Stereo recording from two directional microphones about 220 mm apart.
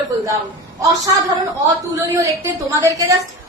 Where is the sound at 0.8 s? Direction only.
15° right (ahead or behind).